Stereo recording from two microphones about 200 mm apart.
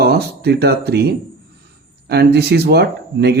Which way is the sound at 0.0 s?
50° right (ahead or behind).